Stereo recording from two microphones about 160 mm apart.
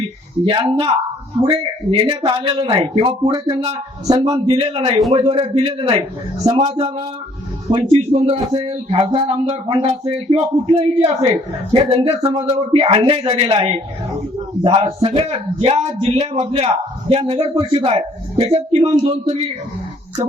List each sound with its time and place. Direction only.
0.4 s speech: 30° right (ahead or behind)
2.0 s speech: 30° right (ahead or behind)